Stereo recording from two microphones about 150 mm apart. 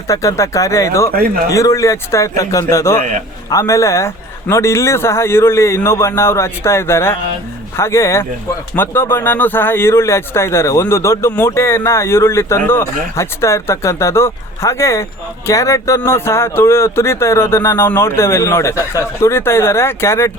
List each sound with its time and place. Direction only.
0.1 s a man's voice: 20° left (ahead or behind)
1.1 s speech: 85° right
1.5 s a man's voice: 20° left (ahead or behind)
3.0 s a man's voice: 60° right (ahead or behind)
3.5 s speech: 20° left (ahead or behind)